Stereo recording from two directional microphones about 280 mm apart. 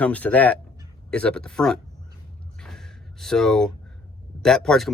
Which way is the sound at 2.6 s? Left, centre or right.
Centre.